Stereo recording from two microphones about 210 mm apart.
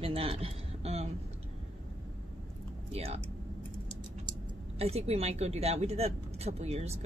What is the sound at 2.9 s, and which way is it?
Speech, 30° right (ahead or behind).